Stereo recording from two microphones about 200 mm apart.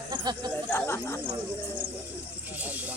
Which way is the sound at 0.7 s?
10° left (ahead or behind).